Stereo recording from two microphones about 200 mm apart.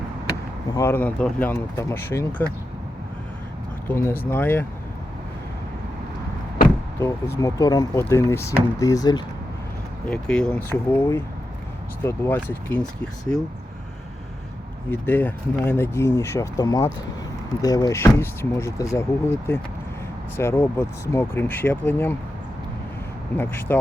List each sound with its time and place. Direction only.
0.7 s speech: 15° left (ahead or behind)
3.8 s speech: 10° left (ahead or behind)
7.0 s speech: 15° left (ahead or behind)
10.1 s speech: 5° left (ahead or behind)
14.8 s speech: 10° left (ahead or behind)
23.4 s speech: 10° left (ahead or behind)